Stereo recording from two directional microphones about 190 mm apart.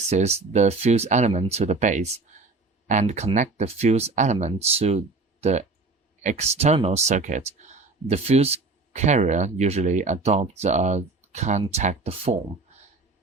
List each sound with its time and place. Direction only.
0.1 s speech: 35° right (ahead or behind)